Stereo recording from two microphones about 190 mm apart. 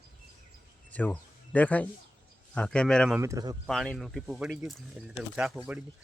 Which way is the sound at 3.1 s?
15° right (ahead or behind).